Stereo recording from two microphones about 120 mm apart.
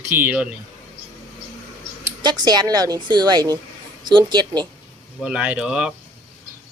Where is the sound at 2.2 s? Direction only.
35° right (ahead or behind).